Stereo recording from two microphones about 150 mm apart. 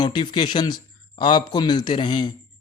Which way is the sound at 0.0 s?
30° left (ahead or behind).